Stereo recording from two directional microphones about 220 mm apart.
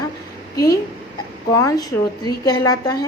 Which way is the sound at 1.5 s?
15° left (ahead or behind).